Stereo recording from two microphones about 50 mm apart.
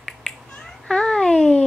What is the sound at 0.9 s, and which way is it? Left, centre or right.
Speech, centre.